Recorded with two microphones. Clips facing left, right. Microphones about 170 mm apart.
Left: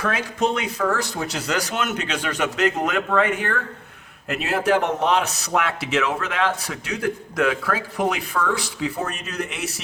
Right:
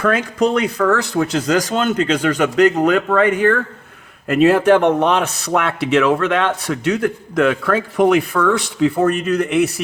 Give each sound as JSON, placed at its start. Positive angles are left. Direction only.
{"t": 0.0, "sound": "a man's voice", "side_deg": -60}
{"t": 1.5, "sound": "a man's voice", "side_deg": -40}
{"t": 6.7, "sound": "a man's voice", "side_deg": -50}